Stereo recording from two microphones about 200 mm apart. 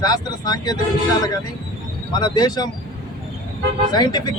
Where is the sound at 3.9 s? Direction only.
20° left (ahead or behind).